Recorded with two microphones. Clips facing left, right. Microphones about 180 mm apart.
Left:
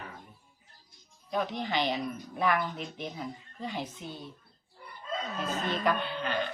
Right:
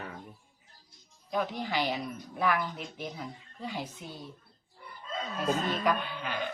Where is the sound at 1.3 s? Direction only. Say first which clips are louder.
Even; 5° right (ahead or behind).